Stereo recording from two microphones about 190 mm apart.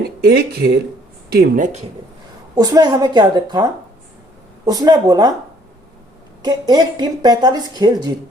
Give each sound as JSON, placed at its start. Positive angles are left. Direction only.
{"t": 0.2, "sound": "speech", "side_deg": -60}
{"t": 1.3, "sound": "speech", "side_deg": -50}
{"t": 2.6, "sound": "a woman's voice", "side_deg": -20}
{"t": 6.4, "sound": "a woman's voice", "side_deg": -20}